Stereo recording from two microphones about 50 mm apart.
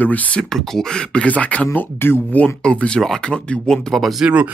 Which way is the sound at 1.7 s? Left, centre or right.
Left.